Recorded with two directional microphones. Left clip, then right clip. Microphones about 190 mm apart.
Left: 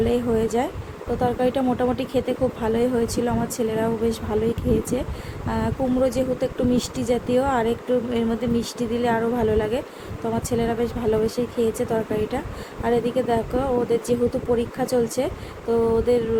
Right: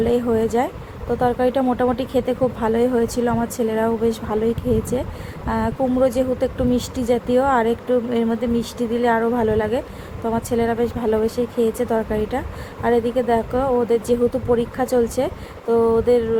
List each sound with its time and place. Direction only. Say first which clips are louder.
0.0 s speech: right 3 dB; 10° right (ahead or behind)